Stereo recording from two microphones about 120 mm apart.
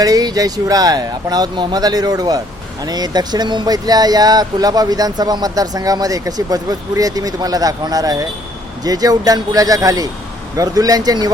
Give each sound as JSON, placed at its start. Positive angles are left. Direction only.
{"t": 0.0, "sound": "speech", "side_deg": -30}